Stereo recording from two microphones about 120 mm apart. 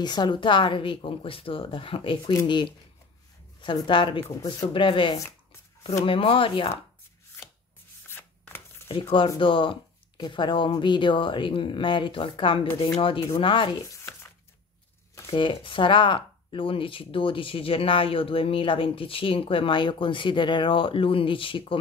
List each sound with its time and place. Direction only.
0.0 s speech: 35° left (ahead or behind)
3.8 s speech: 45° left (ahead or behind)
8.1 s chopping: 20° left (ahead or behind)
9.4 s speech: 45° left (ahead or behind)
15.2 s speech: 45° left (ahead or behind)